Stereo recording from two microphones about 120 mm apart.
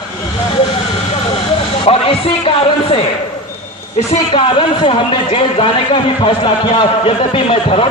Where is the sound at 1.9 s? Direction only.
50° left (ahead or behind).